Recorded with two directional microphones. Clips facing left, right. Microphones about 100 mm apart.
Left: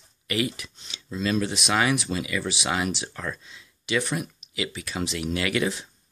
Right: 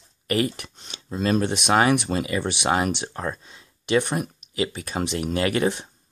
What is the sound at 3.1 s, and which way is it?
Speech, 35° right (ahead or behind).